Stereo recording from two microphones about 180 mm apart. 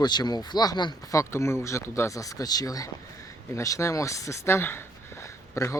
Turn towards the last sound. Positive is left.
turn(degrees=15)  # may be behind; listen again after turning